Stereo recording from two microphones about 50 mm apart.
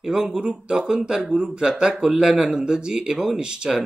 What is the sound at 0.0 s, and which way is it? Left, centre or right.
Speech, centre.